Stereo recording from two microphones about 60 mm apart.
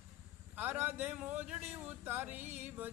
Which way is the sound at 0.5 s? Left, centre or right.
Right.